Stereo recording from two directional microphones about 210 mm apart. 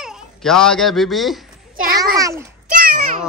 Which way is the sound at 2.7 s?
45° right (ahead or behind).